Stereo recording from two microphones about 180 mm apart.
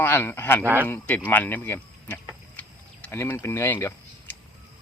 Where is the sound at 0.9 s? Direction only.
10° left (ahead or behind).